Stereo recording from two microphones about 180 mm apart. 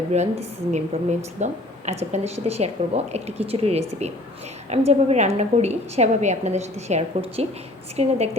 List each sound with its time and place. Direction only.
0.1 s a woman's voice: 40° right (ahead or behind)